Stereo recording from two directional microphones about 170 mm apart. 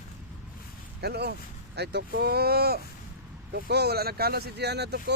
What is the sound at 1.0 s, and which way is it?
Speech, 75° right (ahead or behind).